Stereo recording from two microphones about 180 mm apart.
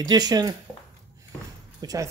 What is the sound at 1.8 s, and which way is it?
Speech, 20° right (ahead or behind).